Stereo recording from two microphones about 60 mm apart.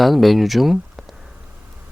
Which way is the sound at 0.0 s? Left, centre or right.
Centre.